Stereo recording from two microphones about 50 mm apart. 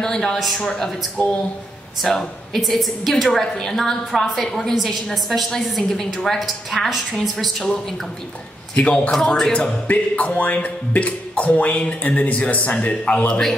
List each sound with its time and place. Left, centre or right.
0.0 s a woman's voice: centre
0.6 s a woman's voice: centre
2.6 s a woman's voice: centre
8.7 s speech: left
9.1 s a woman's voice: centre
9.5 s speech: left
13.3 s a woman's voice: centre